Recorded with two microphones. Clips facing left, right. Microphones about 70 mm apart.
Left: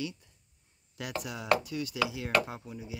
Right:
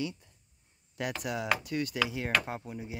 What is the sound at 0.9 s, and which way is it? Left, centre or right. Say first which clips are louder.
Speech: right 3 dB; right.